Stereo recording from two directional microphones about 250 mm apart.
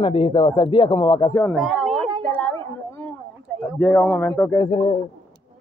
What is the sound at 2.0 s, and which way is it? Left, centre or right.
Speech, right.